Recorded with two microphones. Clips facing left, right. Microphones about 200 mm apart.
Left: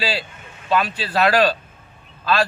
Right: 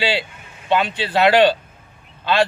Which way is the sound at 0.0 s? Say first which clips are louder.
Right 3 dB; 25° right (ahead or behind).